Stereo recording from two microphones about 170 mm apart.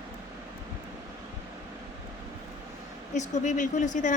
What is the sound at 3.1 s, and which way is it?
Speech, 45° left (ahead or behind).